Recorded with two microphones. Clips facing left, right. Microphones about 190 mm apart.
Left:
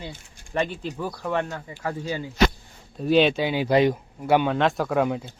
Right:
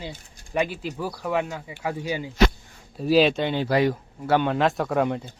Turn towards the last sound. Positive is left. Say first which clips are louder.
# even
turn(degrees=0)  # may be behind; listen again after turning